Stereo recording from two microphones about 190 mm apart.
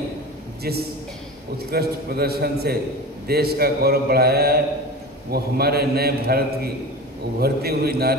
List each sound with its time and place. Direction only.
1.7 s a man's voice: 55° right (ahead or behind)